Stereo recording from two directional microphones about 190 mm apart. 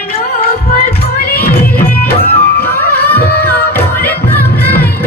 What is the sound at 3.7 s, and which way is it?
Music, 10° left (ahead or behind).